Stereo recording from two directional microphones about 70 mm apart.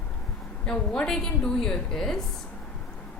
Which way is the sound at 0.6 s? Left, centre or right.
Centre.